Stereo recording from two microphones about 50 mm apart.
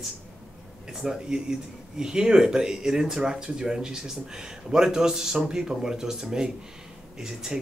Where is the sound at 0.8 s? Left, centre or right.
Centre.